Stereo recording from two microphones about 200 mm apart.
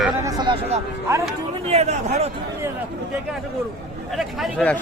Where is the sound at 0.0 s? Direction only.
15° right (ahead or behind).